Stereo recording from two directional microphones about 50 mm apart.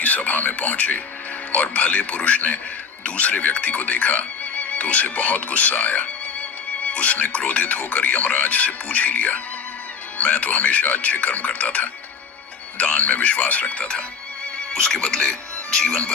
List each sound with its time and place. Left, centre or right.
0.0 s speech: left; by 16.0 s centre